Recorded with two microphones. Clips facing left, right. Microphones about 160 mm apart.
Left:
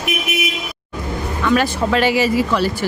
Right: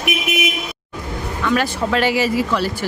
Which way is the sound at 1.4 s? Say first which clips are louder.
Left 2 dB; 20° left (ahead or behind).